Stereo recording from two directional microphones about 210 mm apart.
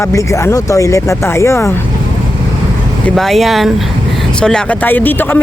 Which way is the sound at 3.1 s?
Centre (ahead or behind).